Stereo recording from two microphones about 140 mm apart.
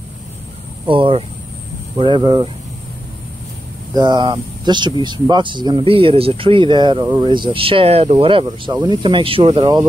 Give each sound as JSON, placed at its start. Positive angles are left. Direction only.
{"t": 0.8, "sound": "speech", "side_deg": -40}
{"t": 3.9, "sound": "speech", "side_deg": -30}